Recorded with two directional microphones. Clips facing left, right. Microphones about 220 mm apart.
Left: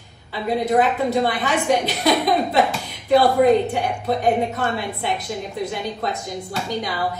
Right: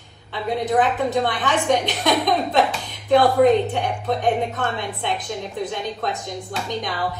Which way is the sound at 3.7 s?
5° left (ahead or behind).